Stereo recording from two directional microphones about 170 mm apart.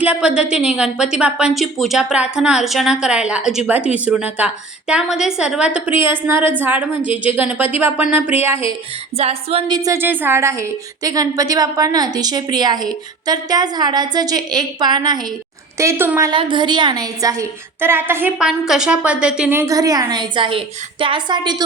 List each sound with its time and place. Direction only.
0.0 s a woman's voice: 5° right (ahead or behind)
9.1 s a woman's voice: 35° right (ahead or behind)
15.8 s speech: 15° right (ahead or behind)
16.3 s a woman's voice: 30° right (ahead or behind)